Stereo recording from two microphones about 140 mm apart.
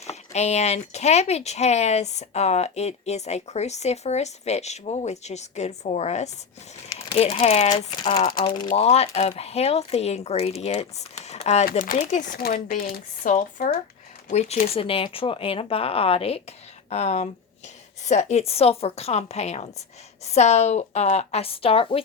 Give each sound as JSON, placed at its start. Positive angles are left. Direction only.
{"t": 0.0, "sound": "speech", "side_deg": 50}
{"t": 7.1, "sound": "speech", "side_deg": 40}
{"t": 7.9, "sound": "speech", "side_deg": 30}
{"t": 8.7, "sound": "speech", "side_deg": 50}
{"t": 11.7, "sound": "speech", "side_deg": 60}
{"t": 14.3, "sound": "speech", "side_deg": 50}